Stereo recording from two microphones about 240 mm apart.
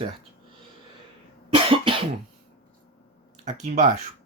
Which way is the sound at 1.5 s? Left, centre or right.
Right.